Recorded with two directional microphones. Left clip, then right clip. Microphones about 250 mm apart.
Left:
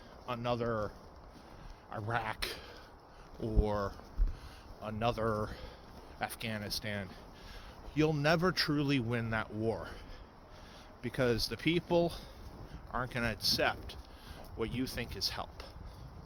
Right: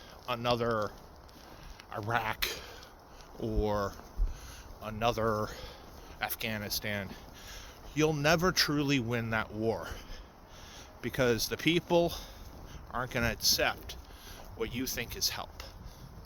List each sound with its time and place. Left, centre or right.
0.3 s speech: right
1.9 s speech: centre
11.0 s speech: centre